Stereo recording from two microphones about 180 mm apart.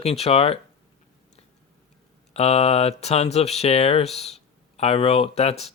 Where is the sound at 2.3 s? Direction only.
35° left (ahead or behind).